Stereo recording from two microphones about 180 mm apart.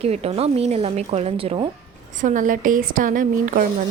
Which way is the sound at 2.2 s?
45° right (ahead or behind).